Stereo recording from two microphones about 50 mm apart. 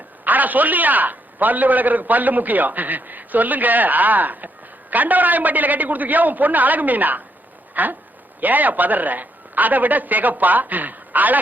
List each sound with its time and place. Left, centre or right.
0.3 s a man's voice: right
7.7 s a sound: right
8.4 s a man's voice: right